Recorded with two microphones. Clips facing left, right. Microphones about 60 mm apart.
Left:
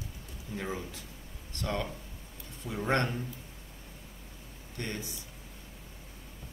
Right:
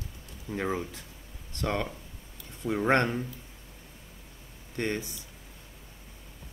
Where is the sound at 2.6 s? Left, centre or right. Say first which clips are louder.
Right 5 dB; right.